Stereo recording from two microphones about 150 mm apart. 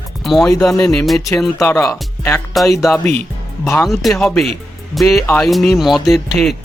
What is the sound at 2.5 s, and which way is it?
Speech, centre (ahead or behind).